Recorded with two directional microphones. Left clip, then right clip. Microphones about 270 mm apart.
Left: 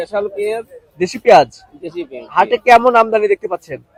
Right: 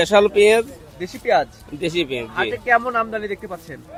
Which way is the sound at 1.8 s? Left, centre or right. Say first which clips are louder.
Right 4 dB; right.